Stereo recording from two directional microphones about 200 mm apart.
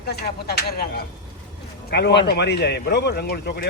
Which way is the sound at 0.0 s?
55° left (ahead or behind).